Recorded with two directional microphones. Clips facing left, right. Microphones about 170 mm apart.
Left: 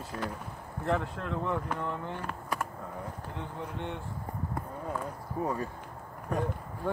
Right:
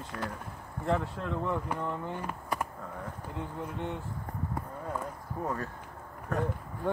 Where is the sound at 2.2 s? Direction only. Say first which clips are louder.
Right 1 dB; 10° right (ahead or behind).